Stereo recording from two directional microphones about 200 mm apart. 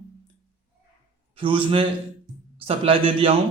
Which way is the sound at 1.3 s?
25° right (ahead or behind).